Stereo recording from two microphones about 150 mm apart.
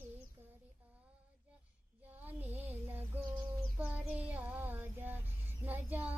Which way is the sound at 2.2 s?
10° right (ahead or behind).